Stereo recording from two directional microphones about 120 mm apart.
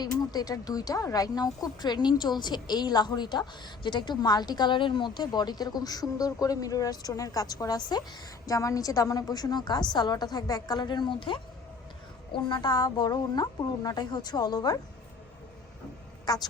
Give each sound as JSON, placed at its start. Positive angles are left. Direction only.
{"t": 0.0, "sound": "speech", "side_deg": 35}
{"t": 16.2, "sound": "speech", "side_deg": 35}